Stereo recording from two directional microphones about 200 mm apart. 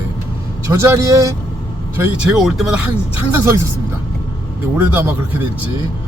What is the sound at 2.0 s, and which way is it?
Speech, 5° right (ahead or behind).